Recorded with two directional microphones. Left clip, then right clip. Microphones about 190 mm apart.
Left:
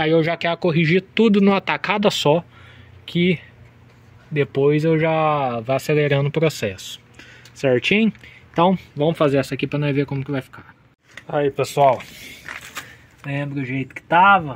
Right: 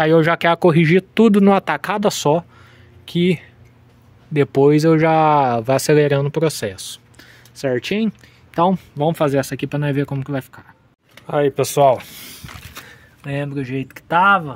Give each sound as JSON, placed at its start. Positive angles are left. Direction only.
{"t": 0.0, "sound": "speech", "side_deg": -40}
{"t": 4.3, "sound": "speech", "side_deg": -30}
{"t": 6.0, "sound": "speech", "side_deg": -5}
{"t": 8.7, "sound": "speech", "side_deg": -15}
{"t": 11.2, "sound": "speech", "side_deg": -35}
{"t": 13.2, "sound": "speech", "side_deg": -25}